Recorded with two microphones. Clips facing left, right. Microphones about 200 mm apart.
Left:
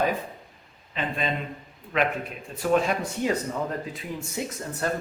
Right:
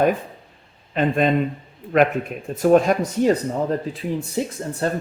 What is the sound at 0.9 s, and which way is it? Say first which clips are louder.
Speech: right 10 dB; 50° right (ahead or behind).